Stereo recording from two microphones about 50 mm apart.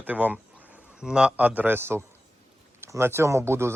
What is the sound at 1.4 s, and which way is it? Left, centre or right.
Speech, right.